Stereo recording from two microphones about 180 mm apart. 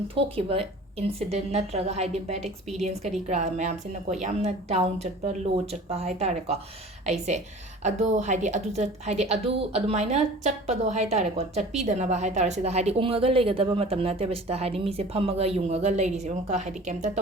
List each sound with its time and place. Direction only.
0.1 s a woman's voice: 30° right (ahead or behind)